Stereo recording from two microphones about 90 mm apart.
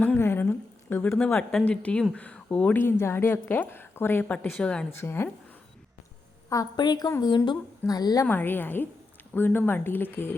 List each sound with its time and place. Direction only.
0.2 s a sound: 25° left (ahead or behind)
1.3 s a woman's voice: 5° left (ahead or behind); by 4.6 s 20° left (ahead or behind)
4.6 s speech: 10° left (ahead or behind)
4.9 s a woman's voice: 25° left (ahead or behind)
6.5 s a woman's voice: 45° left (ahead or behind)
8.3 s a woman's voice: 20° left (ahead or behind)